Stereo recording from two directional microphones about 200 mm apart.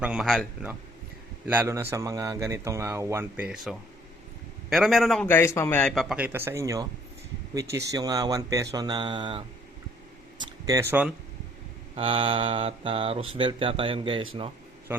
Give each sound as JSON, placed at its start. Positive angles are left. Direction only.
{"t": 0.0, "sound": "a man's voice", "side_deg": -5}
{"t": 8.7, "sound": "mantra", "side_deg": -20}
{"t": 11.0, "sound": "a man's voice", "side_deg": -10}
{"t": 11.9, "sound": "mantra", "side_deg": -25}
{"t": 14.9, "sound": "a man's voice", "side_deg": -10}